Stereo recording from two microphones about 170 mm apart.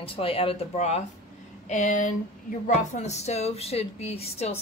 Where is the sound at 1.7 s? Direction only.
50° left (ahead or behind).